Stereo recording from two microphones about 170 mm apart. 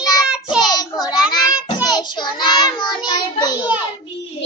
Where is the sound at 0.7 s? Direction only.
25° left (ahead or behind).